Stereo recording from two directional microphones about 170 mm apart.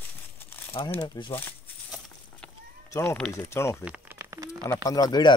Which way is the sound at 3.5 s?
15° left (ahead or behind).